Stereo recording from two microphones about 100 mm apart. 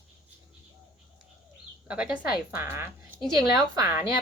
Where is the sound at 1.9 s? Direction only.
10° right (ahead or behind).